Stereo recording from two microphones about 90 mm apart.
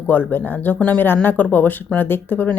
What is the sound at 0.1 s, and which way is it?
Speech, 20° left (ahead or behind).